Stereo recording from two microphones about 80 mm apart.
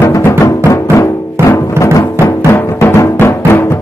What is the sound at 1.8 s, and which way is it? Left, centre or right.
Music, left.